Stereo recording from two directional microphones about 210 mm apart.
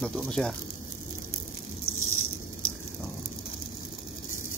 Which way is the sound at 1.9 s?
90° left.